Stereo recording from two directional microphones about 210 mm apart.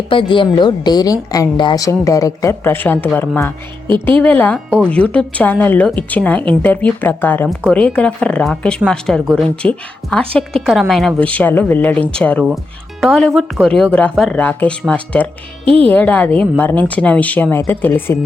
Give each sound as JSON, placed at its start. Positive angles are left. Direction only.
{"t": 0.1, "sound": "a woman's voice", "side_deg": 25}
{"t": 15.6, "sound": "speech", "side_deg": -25}
{"t": 15.9, "sound": "a woman's voice", "side_deg": 5}